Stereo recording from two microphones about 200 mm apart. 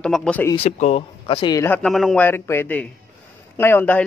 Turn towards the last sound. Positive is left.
turn(degrees=10)  # may be behind; listen again after turning